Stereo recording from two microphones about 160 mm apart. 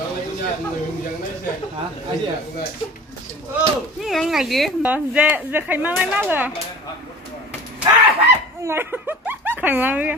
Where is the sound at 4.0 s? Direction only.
Centre (ahead or behind).